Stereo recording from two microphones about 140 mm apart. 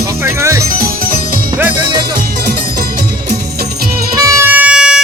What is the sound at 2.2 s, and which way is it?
Music, 85° right.